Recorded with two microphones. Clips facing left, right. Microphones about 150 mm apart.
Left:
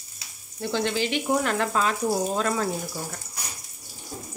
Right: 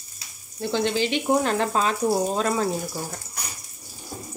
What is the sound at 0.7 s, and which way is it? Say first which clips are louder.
Speech: right 2 dB; 20° right (ahead or behind).